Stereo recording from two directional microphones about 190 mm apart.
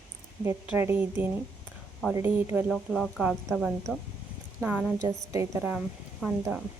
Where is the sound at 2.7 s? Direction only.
Centre (ahead or behind).